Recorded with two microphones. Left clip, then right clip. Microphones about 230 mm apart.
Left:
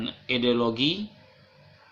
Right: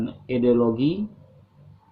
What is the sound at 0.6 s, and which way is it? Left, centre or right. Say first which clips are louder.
Speech: right 3 dB; left.